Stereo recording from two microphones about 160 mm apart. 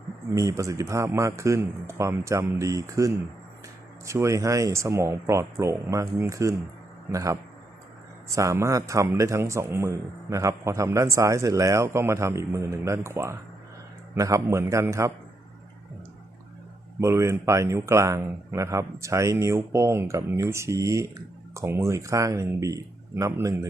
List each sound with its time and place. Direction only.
0.3 s speech: 20° right (ahead or behind)
17.0 s speech: 15° right (ahead or behind)